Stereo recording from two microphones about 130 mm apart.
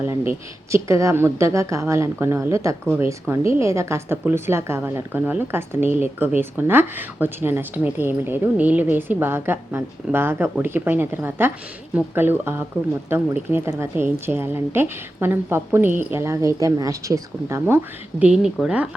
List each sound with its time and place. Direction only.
0.0 s a woman's voice: 20° right (ahead or behind)
18.2 s speech: 5° right (ahead or behind)